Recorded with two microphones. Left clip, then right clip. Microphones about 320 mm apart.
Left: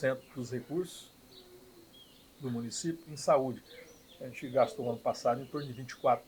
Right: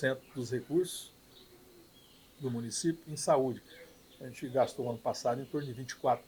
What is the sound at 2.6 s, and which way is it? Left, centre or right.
Speech, right.